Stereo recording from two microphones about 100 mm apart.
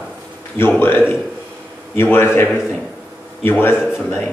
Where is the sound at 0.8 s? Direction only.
20° left (ahead or behind).